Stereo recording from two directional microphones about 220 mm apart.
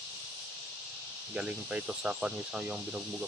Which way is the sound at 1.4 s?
5° right (ahead or behind).